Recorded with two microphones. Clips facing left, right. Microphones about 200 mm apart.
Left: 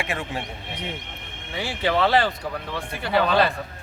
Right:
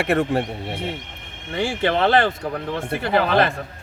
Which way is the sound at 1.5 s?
50° right (ahead or behind).